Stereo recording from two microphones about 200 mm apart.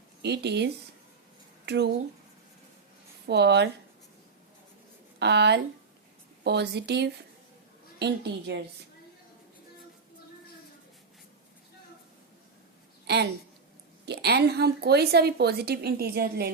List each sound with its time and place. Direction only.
0.2 s speech: 55° right (ahead or behind)
3.2 s speech: 55° right (ahead or behind)
5.2 s speech: 60° right (ahead or behind)
14.0 s a woman's voice: 55° right (ahead or behind)